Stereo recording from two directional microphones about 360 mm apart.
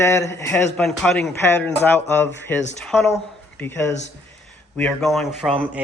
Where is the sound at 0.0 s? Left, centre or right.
Centre.